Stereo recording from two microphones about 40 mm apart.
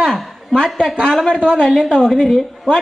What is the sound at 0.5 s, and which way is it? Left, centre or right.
Speech, centre.